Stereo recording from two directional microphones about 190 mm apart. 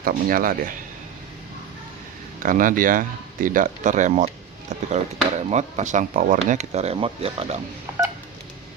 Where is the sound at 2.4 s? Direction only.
45° right (ahead or behind); by 7.5 s 30° right (ahead or behind).